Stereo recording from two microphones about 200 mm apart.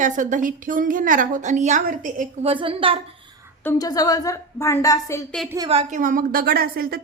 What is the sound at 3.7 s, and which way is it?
A woman's voice, 20° left (ahead or behind).